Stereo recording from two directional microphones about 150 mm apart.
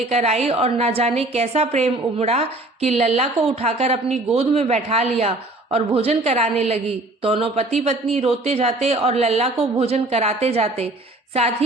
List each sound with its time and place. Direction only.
0.1 s a woman's voice: 45° right (ahead or behind)